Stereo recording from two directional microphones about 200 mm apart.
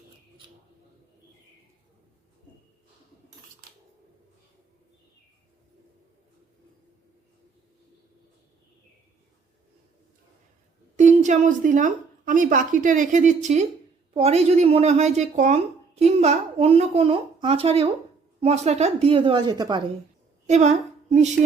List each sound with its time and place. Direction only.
10.9 s a woman's voice: 35° right (ahead or behind); by 19.8 s 20° right (ahead or behind)
20.5 s a woman's voice: 35° right (ahead or behind)